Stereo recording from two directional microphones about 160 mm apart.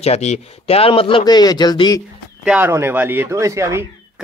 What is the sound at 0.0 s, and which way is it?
Speech, 45° left (ahead or behind).